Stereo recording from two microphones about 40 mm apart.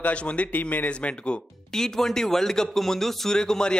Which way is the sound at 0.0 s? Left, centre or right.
Left.